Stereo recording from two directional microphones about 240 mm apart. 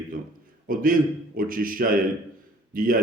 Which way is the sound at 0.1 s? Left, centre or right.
Right.